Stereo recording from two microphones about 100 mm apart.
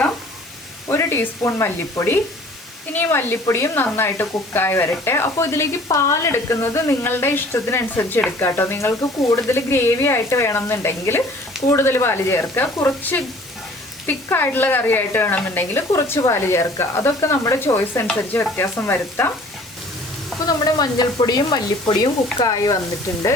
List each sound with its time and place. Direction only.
0.9 s speech: 25° left (ahead or behind)
20.5 s sizzle: 40° left (ahead or behind)
22.4 s speech: 40° left (ahead or behind)